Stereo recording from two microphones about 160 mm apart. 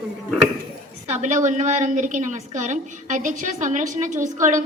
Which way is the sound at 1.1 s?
50° right (ahead or behind).